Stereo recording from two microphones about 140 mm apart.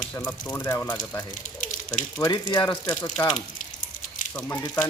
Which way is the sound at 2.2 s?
30° left (ahead or behind).